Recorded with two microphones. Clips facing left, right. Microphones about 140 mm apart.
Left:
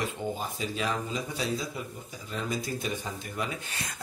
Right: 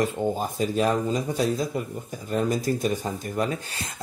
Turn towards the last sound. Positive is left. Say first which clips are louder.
# right 7 dB
turn(degrees=-40)  # may be behind; listen again after turning